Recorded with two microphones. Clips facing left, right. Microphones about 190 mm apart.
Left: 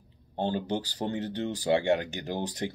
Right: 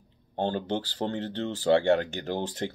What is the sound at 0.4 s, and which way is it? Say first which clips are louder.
Speech: right 1 dB; 10° left (ahead or behind).